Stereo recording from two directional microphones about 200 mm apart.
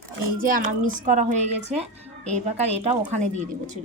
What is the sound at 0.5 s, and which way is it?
A woman's voice, 40° right (ahead or behind).